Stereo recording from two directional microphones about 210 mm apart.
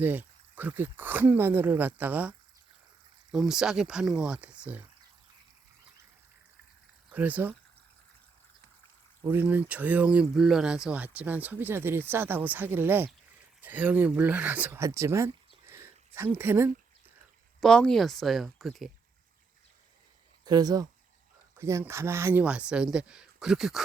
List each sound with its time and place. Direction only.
0.0 s speech: 10° right (ahead or behind)
3.3 s speech: centre (ahead or behind)
7.1 s speech: 5° right (ahead or behind)
9.2 s speech: 10° right (ahead or behind)
17.6 s speech: 5° left (ahead or behind)
20.4 s speech: 20° right (ahead or behind); by 23.8 s centre (ahead or behind)